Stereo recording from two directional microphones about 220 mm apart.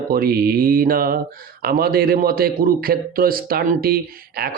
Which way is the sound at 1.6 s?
45° right (ahead or behind).